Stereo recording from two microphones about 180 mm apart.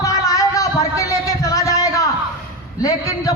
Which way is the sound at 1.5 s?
20° left (ahead or behind).